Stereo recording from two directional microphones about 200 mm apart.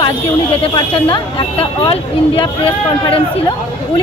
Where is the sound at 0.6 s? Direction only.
25° left (ahead or behind).